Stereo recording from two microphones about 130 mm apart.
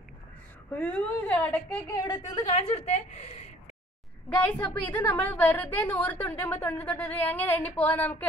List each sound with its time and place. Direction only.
0.7 s a woman's voice: 10° left (ahead or behind)
1.9 s speech: 30° left (ahead or behind)
2.5 s a woman's voice: 55° left (ahead or behind)
4.6 s a woman's voice: 15° left (ahead or behind)